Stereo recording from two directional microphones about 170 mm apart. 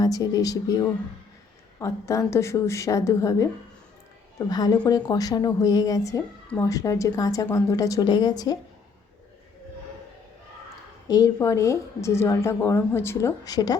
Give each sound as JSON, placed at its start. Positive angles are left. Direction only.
{"t": 0.0, "sound": "speech", "side_deg": 20}
{"t": 11.1, "sound": "speech", "side_deg": 20}